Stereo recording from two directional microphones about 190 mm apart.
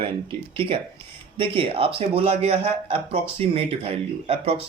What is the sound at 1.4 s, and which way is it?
Speech, 30° right (ahead or behind).